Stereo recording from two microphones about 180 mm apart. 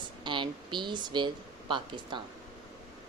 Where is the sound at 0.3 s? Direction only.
25° right (ahead or behind).